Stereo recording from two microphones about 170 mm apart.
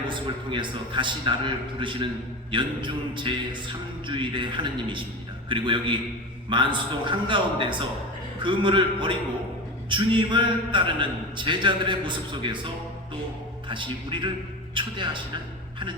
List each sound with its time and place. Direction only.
0.1 s a man's voice: 30° right (ahead or behind)